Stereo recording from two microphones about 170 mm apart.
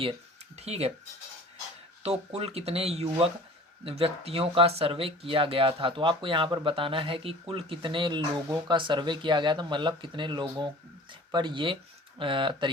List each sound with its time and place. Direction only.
0.5 s speech: 40° right (ahead or behind)
2.0 s speech: 40° right (ahead or behind)